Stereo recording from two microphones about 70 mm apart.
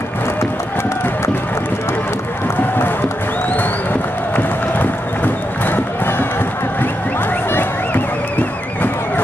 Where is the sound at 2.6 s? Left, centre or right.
Left.